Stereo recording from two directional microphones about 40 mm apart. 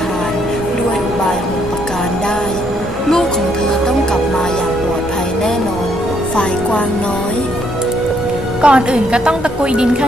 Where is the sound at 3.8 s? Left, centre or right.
Centre.